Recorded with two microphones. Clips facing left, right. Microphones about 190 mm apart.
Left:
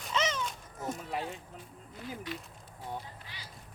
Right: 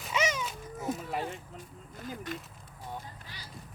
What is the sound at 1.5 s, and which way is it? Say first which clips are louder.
Speech: right 1 dB; 45° right (ahead or behind).